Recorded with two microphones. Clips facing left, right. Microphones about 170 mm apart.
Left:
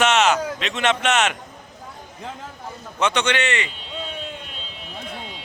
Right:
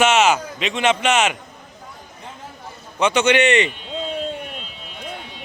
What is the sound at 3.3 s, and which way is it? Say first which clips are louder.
Speech: right 8 dB; 20° right (ahead or behind).